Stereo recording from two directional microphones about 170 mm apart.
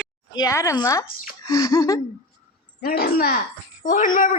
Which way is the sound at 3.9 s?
50° left (ahead or behind).